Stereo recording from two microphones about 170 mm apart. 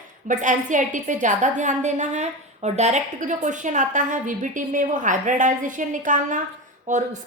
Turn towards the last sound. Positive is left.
turn(degrees=-45)  # may be behind; listen again after turning